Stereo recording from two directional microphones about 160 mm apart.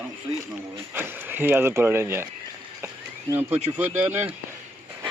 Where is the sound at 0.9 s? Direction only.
15° right (ahead or behind).